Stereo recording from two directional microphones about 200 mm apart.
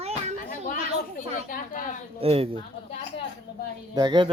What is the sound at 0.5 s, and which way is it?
Speech, 40° left (ahead or behind).